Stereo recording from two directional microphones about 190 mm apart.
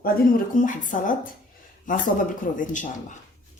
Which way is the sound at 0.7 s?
45° left (ahead or behind).